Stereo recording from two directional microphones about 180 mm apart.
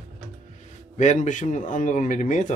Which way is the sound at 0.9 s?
45° left (ahead or behind).